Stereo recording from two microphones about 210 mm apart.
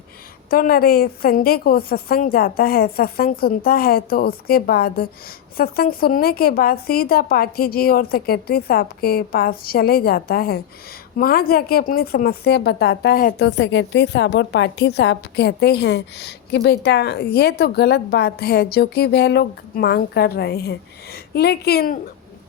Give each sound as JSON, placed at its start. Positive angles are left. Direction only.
{"t": 0.5, "sound": "a woman's voice", "side_deg": 45}